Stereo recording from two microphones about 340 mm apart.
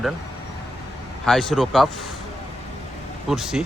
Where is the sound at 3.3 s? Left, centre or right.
Centre.